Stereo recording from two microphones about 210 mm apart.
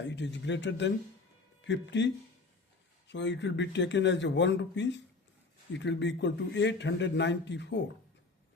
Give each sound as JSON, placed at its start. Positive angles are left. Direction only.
{"t": 0.0, "sound": "a man's voice", "side_deg": 55}